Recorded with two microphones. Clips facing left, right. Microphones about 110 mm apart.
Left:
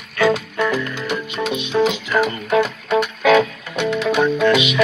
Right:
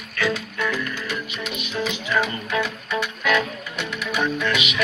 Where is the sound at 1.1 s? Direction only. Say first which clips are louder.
Left 8 dB; 25° left (ahead or behind).